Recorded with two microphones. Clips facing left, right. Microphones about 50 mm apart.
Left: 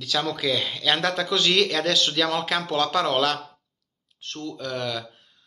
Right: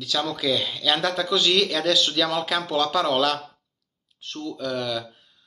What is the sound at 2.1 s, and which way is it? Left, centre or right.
Speech, left.